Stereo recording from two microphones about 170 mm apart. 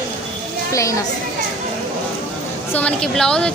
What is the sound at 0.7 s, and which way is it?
Speech, 20° left (ahead or behind).